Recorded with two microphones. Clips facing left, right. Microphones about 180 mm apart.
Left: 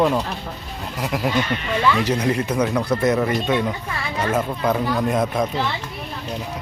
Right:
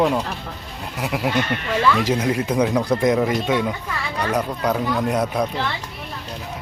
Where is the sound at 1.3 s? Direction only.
55° right (ahead or behind).